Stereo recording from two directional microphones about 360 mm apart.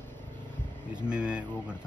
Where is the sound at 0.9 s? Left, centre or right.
Centre.